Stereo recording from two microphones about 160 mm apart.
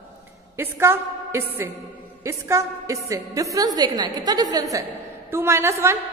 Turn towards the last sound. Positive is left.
turn(degrees=-15)  # may be behind; listen again after turning